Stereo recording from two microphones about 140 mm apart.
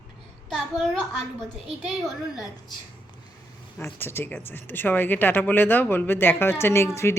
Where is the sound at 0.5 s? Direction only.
5° left (ahead or behind).